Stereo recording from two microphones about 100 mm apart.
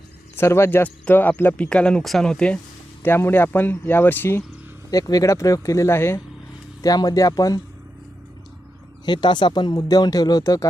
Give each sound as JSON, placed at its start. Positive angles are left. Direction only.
{"t": 0.3, "sound": "speech", "side_deg": 25}
{"t": 3.0, "sound": "speech", "side_deg": 20}
{"t": 4.9, "sound": "speech", "side_deg": 35}
{"t": 6.8, "sound": "speech", "side_deg": 35}
{"t": 9.0, "sound": "speech", "side_deg": 50}